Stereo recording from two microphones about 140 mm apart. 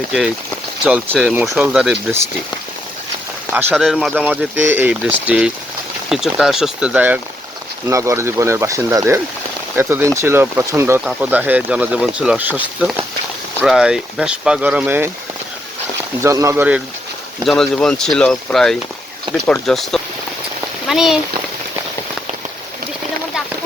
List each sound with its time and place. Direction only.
0.9 s speech: 10° right (ahead or behind)
3.8 s speech: centre (ahead or behind)
4.3 s speech: 15° right (ahead or behind)
16.2 s speech: 20° right (ahead or behind)
17.4 s speech: 5° left (ahead or behind)
20.8 s rain on surface: 5° right (ahead or behind)